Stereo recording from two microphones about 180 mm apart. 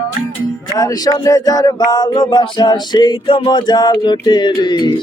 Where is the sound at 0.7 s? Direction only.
20° left (ahead or behind).